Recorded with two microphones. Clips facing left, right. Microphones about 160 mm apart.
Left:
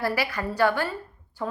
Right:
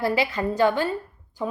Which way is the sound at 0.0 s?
20° right (ahead or behind).